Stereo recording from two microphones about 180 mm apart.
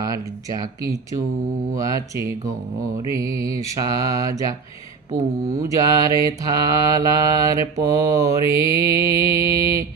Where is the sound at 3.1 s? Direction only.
15° right (ahead or behind).